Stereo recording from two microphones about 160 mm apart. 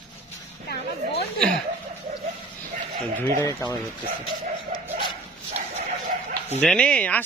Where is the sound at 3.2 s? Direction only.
15° left (ahead or behind).